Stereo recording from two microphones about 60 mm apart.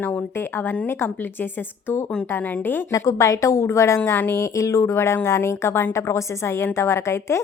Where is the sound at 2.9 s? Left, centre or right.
Left.